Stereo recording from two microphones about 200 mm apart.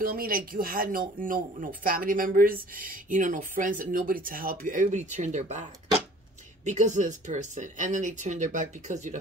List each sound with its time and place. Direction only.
0.0 s speech: 45° right (ahead or behind)